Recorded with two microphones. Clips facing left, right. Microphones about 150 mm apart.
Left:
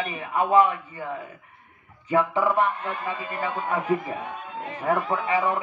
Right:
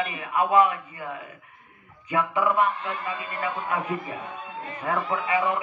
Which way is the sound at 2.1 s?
30° left (ahead or behind).